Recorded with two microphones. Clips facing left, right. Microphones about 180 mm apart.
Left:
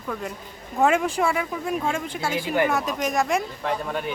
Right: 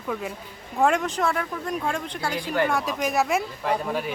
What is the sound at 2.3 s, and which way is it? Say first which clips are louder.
Speech: left 2 dB; 25° left (ahead or behind).